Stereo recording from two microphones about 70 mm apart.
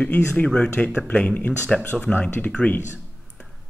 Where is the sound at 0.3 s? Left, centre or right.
Centre.